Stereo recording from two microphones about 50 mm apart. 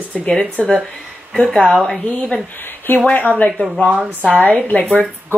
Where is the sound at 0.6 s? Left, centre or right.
Left.